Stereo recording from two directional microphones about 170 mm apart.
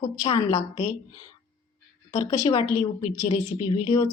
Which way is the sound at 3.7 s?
25° left (ahead or behind).